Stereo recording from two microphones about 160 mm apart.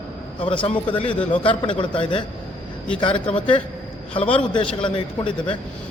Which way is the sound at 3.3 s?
10° left (ahead or behind).